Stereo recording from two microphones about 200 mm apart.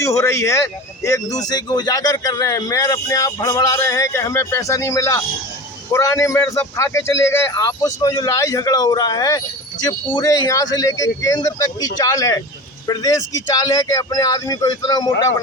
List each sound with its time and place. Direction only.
0.0 s a man's voice: 15° left (ahead or behind)